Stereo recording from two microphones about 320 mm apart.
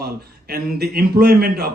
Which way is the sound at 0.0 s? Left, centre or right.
Right.